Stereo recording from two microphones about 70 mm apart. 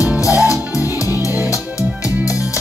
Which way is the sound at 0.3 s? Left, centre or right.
Left.